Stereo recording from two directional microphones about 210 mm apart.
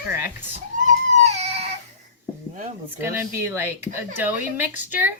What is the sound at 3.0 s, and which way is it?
Speech, 10° right (ahead or behind).